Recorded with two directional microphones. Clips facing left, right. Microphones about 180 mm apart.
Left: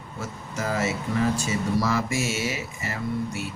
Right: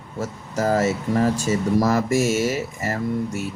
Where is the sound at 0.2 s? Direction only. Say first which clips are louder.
Right 7 dB; 40° right (ahead or behind).